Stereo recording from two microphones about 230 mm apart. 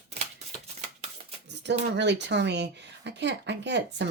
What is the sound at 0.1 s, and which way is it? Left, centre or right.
Shuffling cards, right.